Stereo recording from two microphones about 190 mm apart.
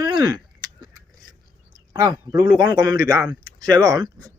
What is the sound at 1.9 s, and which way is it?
Speech, 15° right (ahead or behind).